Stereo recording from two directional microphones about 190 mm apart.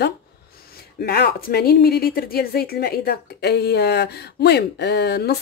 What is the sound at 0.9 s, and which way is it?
A woman's voice, 55° left (ahead or behind).